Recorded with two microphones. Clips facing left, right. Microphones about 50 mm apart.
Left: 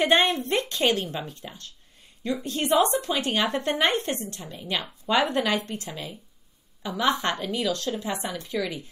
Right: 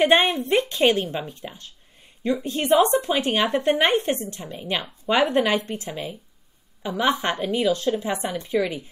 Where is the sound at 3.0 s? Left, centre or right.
Right.